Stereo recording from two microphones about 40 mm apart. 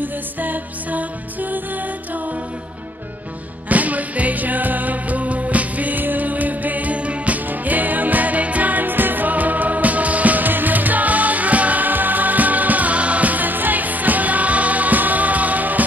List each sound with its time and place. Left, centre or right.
0.0 s music: right
3.6 s music: right